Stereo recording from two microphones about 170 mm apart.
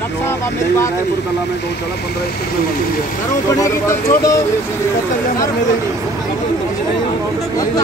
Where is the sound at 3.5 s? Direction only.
20° left (ahead or behind).